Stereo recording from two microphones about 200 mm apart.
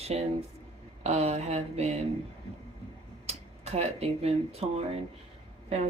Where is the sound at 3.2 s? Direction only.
30° right (ahead or behind).